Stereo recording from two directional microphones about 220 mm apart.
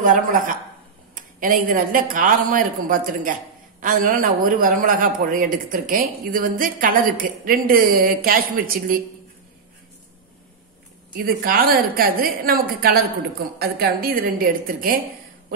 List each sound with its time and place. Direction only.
0.0 s a man's voice: 35° right (ahead or behind)
11.1 s a man's voice: 40° right (ahead or behind)